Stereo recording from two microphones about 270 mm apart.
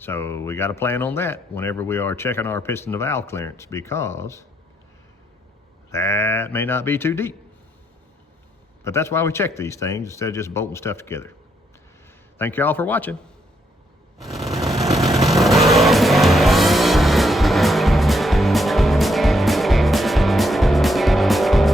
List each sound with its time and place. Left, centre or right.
0.0 s speech: centre
5.9 s speech: centre
8.8 s speech: centre
12.4 s speech: centre
14.2 s vehicle: centre